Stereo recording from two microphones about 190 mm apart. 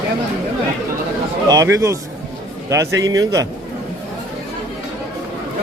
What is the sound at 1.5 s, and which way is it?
Speech, 15° right (ahead or behind).